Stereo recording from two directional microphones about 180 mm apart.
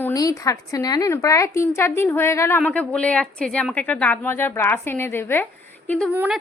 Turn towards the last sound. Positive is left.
turn(degrees=-10)  # may be behind; listen again after turning